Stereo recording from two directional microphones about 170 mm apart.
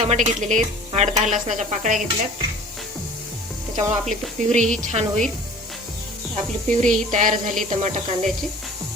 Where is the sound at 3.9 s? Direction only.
45° right (ahead or behind).